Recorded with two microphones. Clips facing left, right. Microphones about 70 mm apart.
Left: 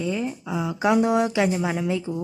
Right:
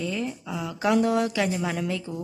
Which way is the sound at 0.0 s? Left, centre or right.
Centre.